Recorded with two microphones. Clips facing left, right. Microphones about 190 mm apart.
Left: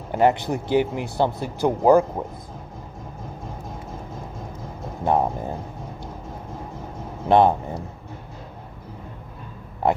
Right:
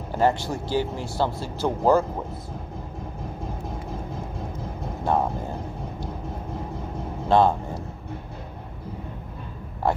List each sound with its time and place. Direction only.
0.1 s speech: 20° left (ahead or behind)
5.0 s speech: 20° left (ahead or behind)
7.2 s vehicle: 20° left (ahead or behind)